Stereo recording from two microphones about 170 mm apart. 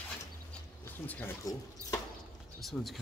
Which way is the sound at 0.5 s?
10° left (ahead or behind).